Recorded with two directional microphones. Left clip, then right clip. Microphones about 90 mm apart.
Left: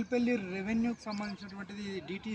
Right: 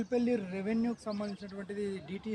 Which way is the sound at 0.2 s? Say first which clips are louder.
Even; 40° right (ahead or behind).